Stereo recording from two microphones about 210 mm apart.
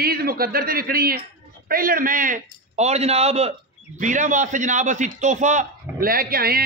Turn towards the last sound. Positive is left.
turn(degrees=-45)  # may be behind; listen again after turning